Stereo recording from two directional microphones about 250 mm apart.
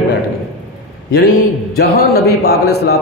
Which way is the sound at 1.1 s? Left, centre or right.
Left.